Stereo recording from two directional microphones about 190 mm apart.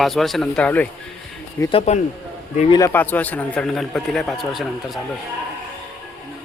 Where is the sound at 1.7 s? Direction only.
35° left (ahead or behind).